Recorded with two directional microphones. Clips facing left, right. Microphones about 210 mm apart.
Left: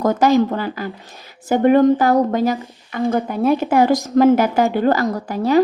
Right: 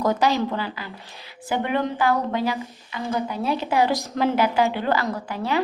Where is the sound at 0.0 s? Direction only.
45° left (ahead or behind).